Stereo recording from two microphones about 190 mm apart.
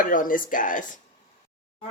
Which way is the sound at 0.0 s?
45° left (ahead or behind).